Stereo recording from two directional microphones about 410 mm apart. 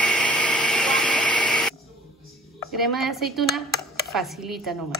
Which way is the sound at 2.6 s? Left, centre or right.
Centre.